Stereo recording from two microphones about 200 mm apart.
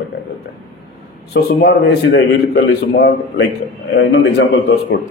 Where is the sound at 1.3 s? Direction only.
50° left (ahead or behind).